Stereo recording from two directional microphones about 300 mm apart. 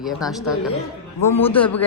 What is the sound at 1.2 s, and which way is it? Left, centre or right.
Speech, left.